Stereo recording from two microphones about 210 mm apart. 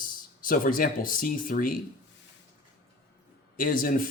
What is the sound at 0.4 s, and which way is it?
Speech, 40° left (ahead or behind).